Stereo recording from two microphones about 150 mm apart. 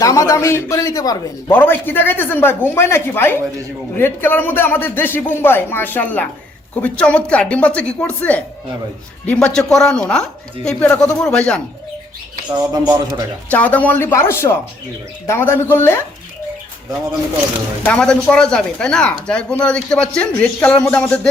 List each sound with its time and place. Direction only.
0.0 s a man's voice: 20° left (ahead or behind)
1.5 s speech: 15° left (ahead or behind)
12.7 s speech: 30° right (ahead or behind)
13.5 s speech: 10° left (ahead or behind)
17.8 s speech: 5° left (ahead or behind)